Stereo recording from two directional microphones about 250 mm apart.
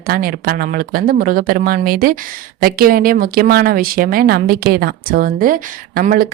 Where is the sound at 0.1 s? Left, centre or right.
Right.